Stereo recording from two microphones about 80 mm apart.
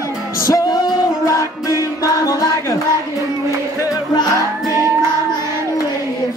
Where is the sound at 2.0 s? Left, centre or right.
Left.